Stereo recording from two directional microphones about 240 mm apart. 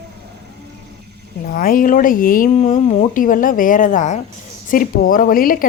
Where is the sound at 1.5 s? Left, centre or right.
Left.